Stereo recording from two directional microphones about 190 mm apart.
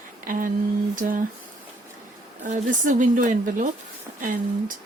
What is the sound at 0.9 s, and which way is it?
Speech, 45° right (ahead or behind).